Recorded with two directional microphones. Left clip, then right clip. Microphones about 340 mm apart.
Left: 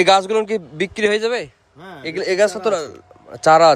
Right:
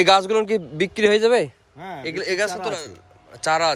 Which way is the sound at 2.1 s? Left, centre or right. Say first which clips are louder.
Left 7 dB; centre.